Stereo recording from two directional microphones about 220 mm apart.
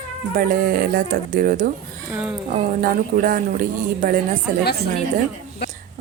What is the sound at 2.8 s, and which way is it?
Speech, 40° right (ahead or behind).